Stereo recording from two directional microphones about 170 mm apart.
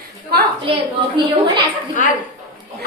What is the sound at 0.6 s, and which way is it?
A woman's voice, 30° right (ahead or behind).